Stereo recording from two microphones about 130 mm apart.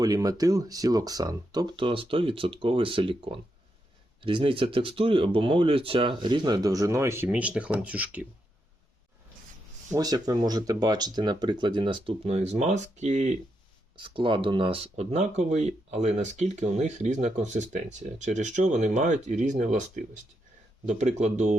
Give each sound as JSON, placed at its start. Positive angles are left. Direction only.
{"t": 0.0, "sound": "speech", "side_deg": -30}
{"t": 7.3, "sound": "speech", "side_deg": -10}
{"t": 9.9, "sound": "speech", "side_deg": -30}
{"t": 13.9, "sound": "speech", "side_deg": -40}
{"t": 20.8, "sound": "speech", "side_deg": -65}